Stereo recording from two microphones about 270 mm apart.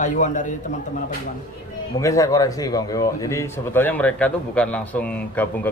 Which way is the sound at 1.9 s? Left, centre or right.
Centre.